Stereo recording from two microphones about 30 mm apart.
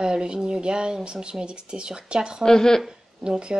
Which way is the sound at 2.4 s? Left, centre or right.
Centre.